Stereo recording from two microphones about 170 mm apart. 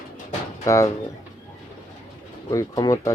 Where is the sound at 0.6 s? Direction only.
15° left (ahead or behind).